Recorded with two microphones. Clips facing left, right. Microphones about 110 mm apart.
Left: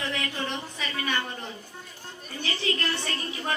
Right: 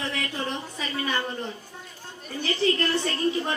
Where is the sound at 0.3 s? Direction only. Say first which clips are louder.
Right 1 dB; 35° right (ahead or behind).